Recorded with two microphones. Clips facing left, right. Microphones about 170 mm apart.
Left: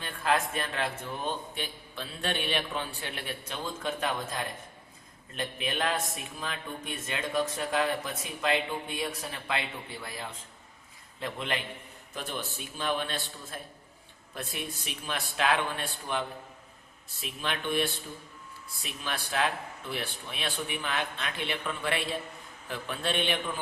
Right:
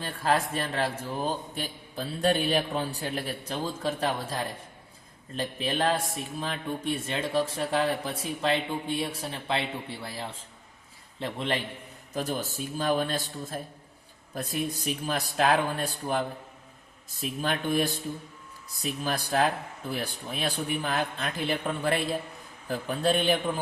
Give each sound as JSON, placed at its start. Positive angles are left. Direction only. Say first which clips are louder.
{"t": 0.0, "sound": "a man's voice", "louder": "right 2 dB", "side_deg": -35}